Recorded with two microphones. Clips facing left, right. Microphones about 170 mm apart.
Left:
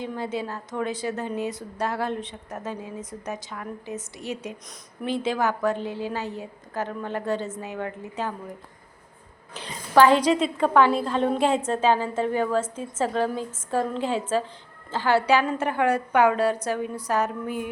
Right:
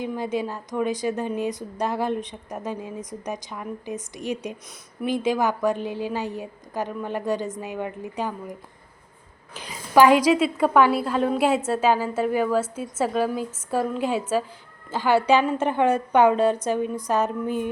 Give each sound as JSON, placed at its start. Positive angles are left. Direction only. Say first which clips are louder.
{"t": 0.0, "sound": "a woman's voice", "louder": "right 3 dB", "side_deg": -15}
{"t": 9.6, "sound": "a woman's voice", "louder": "right 1 dB", "side_deg": -10}